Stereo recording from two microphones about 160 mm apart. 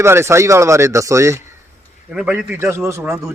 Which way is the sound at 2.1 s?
5° right (ahead or behind).